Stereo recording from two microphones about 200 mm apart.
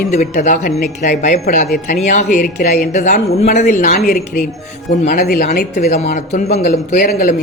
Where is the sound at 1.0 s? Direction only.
40° left (ahead or behind).